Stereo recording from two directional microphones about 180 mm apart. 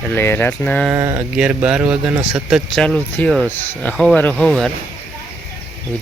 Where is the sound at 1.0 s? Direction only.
20° right (ahead or behind).